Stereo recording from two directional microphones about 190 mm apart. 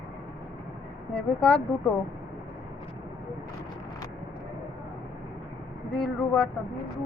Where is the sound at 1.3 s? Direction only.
5° left (ahead or behind).